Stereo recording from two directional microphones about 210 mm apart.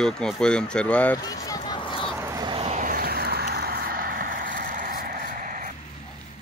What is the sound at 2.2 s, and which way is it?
Vehicle, 15° right (ahead or behind).